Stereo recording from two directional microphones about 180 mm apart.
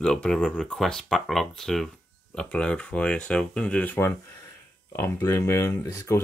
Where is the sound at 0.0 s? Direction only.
5° left (ahead or behind).